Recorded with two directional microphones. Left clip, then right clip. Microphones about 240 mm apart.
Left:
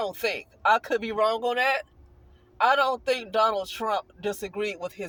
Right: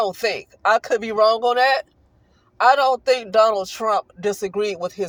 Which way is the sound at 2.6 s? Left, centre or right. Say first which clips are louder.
Right 7 dB; right.